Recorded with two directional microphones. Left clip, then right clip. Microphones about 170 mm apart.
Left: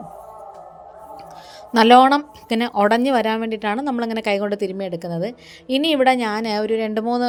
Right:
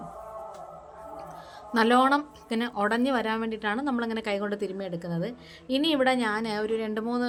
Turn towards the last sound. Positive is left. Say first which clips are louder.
# left 9 dB
turn(degrees=30)  # may be behind; listen again after turning